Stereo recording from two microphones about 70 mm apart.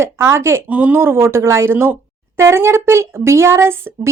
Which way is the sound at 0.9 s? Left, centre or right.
Right.